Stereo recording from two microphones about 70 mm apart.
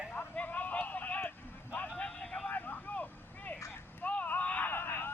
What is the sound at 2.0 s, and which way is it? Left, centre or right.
Vehicle, centre.